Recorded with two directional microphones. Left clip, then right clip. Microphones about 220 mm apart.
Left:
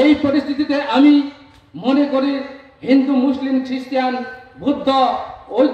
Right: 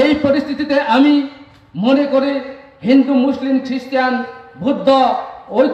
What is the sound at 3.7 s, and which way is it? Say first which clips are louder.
A man's voice: right 3 dB; 45° right (ahead or behind).